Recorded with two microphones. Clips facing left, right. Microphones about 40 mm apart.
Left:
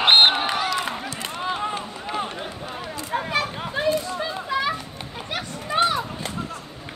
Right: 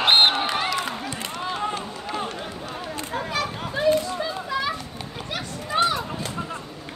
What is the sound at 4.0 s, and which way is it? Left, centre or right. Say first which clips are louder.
Children playing: right 1 dB; left.